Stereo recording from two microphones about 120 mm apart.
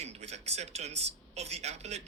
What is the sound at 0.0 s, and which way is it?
Speech, 65° right (ahead or behind).